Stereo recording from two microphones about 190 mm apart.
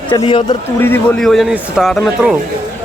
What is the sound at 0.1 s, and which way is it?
Speech, 25° left (ahead or behind).